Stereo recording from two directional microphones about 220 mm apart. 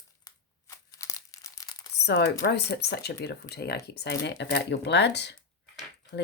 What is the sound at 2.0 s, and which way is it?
A woman's voice, 50° left (ahead or behind).